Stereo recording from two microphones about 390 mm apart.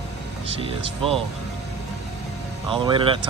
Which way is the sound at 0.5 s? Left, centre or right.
Centre.